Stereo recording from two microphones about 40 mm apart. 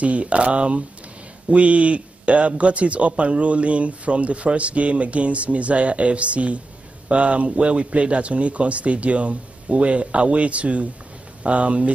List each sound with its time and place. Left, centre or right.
0.0 s speech: right